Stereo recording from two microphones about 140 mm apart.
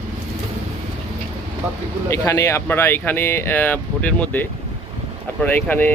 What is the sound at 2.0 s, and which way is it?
Speech, 20° left (ahead or behind).